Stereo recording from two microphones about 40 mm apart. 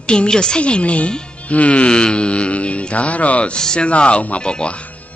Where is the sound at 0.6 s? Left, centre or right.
Left.